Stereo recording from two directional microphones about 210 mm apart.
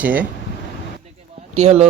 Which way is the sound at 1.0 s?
30° right (ahead or behind).